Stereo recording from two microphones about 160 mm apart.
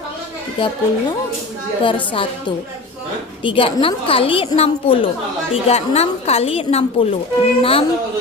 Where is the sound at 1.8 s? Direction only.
30° left (ahead or behind).